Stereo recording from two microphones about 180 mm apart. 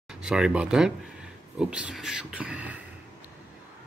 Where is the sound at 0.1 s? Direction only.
5° right (ahead or behind).